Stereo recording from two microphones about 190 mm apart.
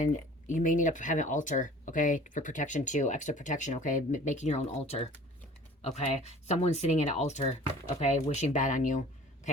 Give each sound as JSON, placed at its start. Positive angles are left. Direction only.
{"t": 0.0, "sound": "speech", "side_deg": 40}